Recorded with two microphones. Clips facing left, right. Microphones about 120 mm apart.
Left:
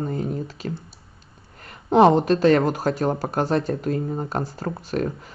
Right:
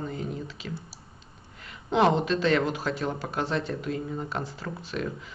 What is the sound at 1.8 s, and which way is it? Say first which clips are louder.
Speech: left 7 dB; 40° left (ahead or behind).